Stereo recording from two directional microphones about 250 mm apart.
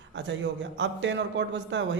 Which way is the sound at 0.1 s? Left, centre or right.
Right.